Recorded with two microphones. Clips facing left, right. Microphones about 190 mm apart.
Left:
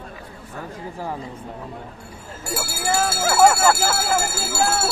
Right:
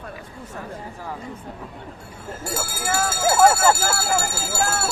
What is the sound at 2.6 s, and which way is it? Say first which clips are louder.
Speech: left 3 dB; 10° left (ahead or behind).